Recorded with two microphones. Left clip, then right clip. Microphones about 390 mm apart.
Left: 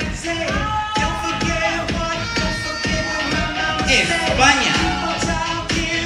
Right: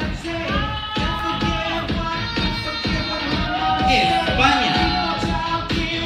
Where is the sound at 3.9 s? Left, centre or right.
Left.